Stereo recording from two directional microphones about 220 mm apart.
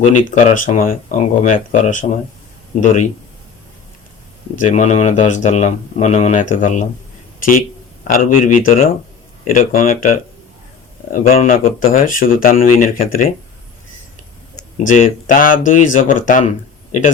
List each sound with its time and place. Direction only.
0.0 s speech: 30° left (ahead or behind)
4.5 s speech: 35° left (ahead or behind)
14.8 s speech: 35° left (ahead or behind)